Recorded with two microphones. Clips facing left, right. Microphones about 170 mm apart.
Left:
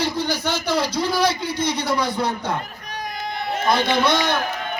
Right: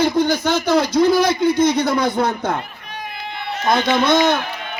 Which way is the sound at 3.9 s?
50° right (ahead or behind).